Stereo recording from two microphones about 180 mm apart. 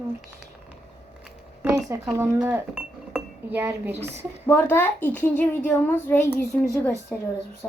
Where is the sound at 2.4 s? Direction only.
10° right (ahead or behind).